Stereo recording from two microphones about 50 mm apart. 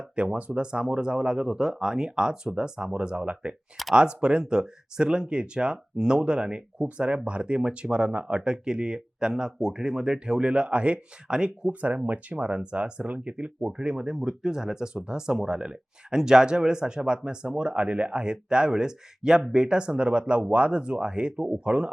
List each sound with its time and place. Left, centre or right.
0.2 s speech: right
11.7 s speech: right